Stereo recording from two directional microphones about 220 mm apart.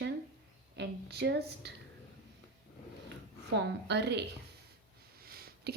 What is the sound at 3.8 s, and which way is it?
Speech, 50° right (ahead or behind).